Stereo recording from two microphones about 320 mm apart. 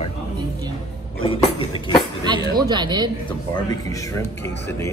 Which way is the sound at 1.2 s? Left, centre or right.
Centre.